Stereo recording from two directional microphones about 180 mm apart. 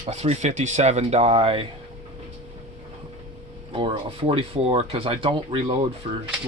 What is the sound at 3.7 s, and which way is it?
Speech, 30° right (ahead or behind).